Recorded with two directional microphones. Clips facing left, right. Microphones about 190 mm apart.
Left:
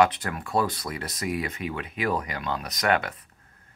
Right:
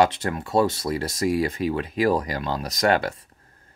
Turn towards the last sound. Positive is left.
turn(degrees=-30)  # may be behind; listen again after turning